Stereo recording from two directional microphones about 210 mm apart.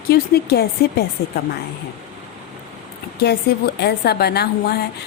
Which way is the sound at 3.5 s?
50° left (ahead or behind).